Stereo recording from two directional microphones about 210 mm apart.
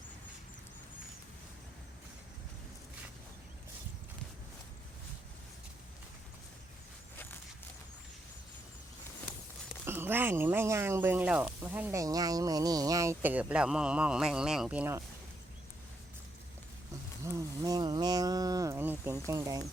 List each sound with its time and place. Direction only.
9.8 s speech: 10° right (ahead or behind)
17.2 s speech: 15° right (ahead or behind)